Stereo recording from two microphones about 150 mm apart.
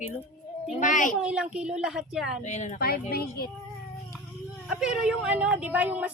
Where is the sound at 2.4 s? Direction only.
50° left (ahead or behind).